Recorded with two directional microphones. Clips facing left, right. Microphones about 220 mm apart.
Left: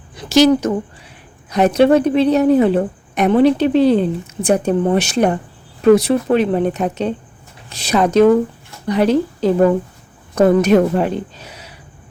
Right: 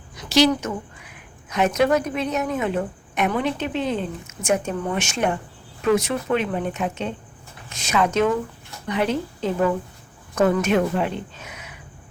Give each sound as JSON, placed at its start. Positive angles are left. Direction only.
{"t": 0.3, "sound": "a woman's voice", "side_deg": 45}
{"t": 1.0, "sound": "a woman's voice", "side_deg": 35}